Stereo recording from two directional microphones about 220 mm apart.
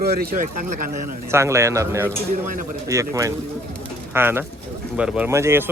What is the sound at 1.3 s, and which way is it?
Speech, 10° right (ahead or behind).